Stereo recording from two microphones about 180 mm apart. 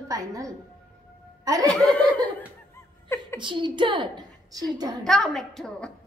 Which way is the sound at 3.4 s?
25° right (ahead or behind).